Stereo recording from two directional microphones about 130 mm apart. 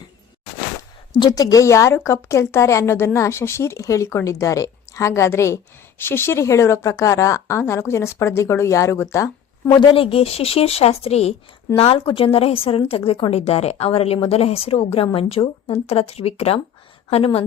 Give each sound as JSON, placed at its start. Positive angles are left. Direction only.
{"t": 1.2, "sound": "a woman's voice", "side_deg": 30}
{"t": 9.6, "sound": "speech", "side_deg": 35}